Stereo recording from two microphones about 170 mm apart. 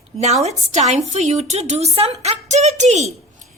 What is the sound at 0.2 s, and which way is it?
A woman's voice, 40° right (ahead or behind).